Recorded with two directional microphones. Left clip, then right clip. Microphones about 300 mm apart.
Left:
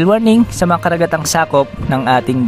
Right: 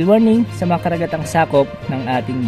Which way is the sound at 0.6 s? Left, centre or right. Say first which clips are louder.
Left 5 dB; left.